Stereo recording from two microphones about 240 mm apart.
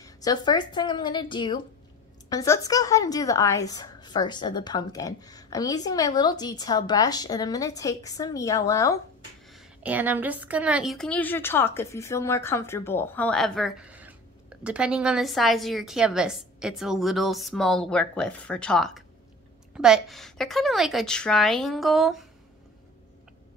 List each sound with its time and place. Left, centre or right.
0.0 s a woman's voice: centre
9.5 s a woman's voice: centre